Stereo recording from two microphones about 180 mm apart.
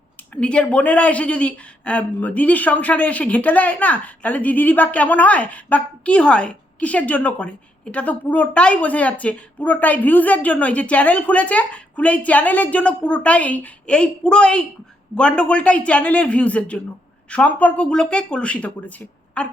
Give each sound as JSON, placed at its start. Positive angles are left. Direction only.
{"t": 0.3, "sound": "a woman's voice", "side_deg": 5}